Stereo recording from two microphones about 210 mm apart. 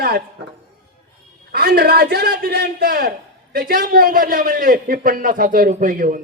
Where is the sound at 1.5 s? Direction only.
45° right (ahead or behind).